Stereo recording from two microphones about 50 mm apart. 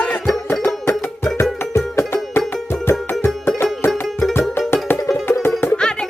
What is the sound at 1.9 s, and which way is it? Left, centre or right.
Music, left.